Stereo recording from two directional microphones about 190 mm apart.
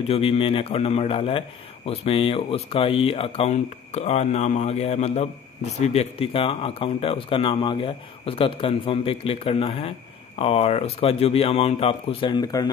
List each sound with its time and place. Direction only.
0.1 s speech: 30° left (ahead or behind)